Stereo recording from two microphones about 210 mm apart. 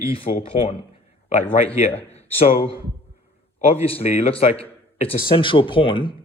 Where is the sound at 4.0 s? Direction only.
30° left (ahead or behind).